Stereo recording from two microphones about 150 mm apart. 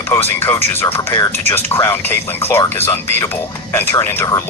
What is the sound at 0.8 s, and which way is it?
Speech, 15° left (ahead or behind).